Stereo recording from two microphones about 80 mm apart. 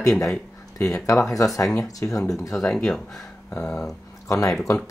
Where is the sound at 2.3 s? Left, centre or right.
Centre.